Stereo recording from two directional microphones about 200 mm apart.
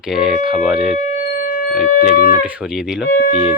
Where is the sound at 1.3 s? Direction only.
45° left (ahead or behind).